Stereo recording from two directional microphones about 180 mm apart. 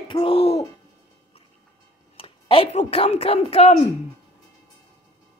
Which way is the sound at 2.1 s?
30° left (ahead or behind).